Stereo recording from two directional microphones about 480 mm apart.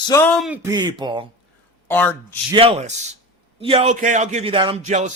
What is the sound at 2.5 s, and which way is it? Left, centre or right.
Speech, centre.